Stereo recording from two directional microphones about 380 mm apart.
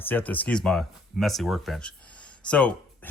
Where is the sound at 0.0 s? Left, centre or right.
Centre.